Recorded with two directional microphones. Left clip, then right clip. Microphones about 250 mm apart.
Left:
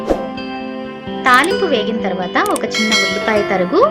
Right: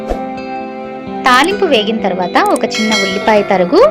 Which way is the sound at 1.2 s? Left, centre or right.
Right.